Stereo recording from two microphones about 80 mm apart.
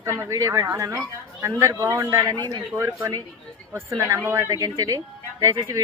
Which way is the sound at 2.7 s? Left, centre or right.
Right.